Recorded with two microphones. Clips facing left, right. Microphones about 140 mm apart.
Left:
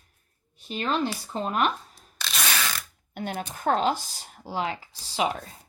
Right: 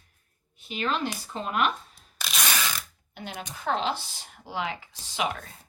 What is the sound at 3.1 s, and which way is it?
A woman's voice, 55° left (ahead or behind).